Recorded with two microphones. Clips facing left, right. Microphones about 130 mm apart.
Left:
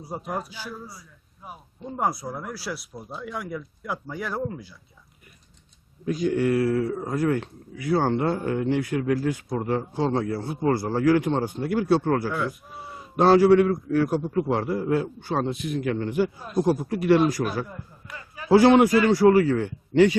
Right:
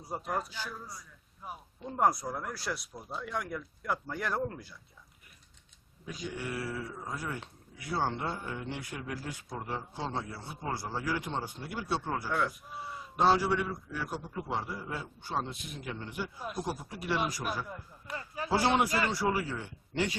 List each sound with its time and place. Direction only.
0.0 s a man's voice: 10° left (ahead or behind)
6.1 s a man's voice: 55° left (ahead or behind)
7.3 s speech: centre (ahead or behind)
7.9 s speech: 75° left (ahead or behind)
11.6 s a man's voice: 65° left (ahead or behind)
12.3 s speech: centre (ahead or behind)
12.8 s a man's voice: 60° left (ahead or behind); by 16.3 s 75° left (ahead or behind)
16.6 s a man's voice: 60° left (ahead or behind)
17.4 s a man's voice: 40° left (ahead or behind)
18.4 s speech: 70° left (ahead or behind)